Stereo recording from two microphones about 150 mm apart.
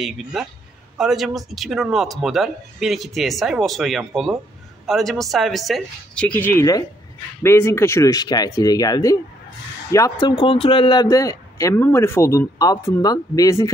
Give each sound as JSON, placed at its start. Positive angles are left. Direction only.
{"t": 0.0, "sound": "speech", "side_deg": 0}